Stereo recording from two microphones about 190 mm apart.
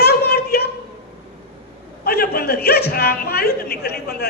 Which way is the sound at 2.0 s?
55° left (ahead or behind).